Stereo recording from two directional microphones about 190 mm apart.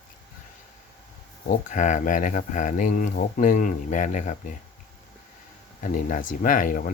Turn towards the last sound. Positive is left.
turn(degrees=45)  # may be behind; listen again after turning